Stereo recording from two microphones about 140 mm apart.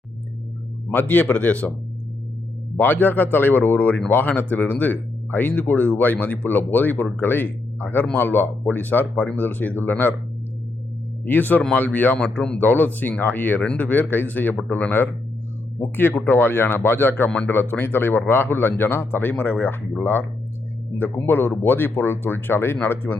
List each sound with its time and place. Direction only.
0.9 s speech: 15° left (ahead or behind)
2.8 s speech: 15° left (ahead or behind)
11.3 s speech: 15° left (ahead or behind)